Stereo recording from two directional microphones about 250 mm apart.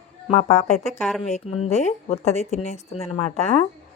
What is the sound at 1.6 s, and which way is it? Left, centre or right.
Speech, left.